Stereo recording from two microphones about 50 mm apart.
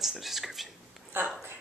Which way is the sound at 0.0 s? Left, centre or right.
Centre.